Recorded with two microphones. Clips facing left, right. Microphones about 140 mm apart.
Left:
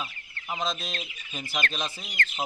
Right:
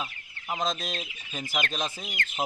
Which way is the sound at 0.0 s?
Centre (ahead or behind).